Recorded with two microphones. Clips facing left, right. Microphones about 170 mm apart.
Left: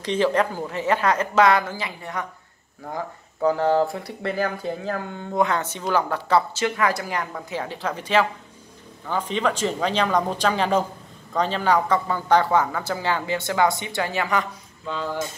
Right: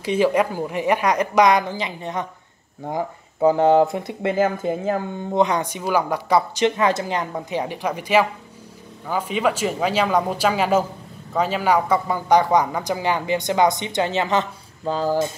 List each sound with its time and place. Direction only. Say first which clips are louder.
0.0 s speech: right 2 dB; 10° right (ahead or behind)
14.9 s speech: right 7 dB; 35° right (ahead or behind)